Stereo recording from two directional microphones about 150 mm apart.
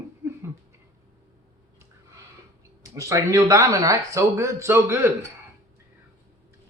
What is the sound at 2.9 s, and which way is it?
Speech, 20° right (ahead or behind).